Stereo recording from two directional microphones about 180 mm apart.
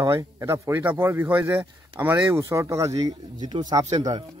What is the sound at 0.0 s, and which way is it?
A man's voice, 15° right (ahead or behind).